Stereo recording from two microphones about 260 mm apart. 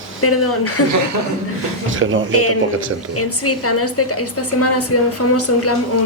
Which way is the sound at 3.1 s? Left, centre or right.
Left.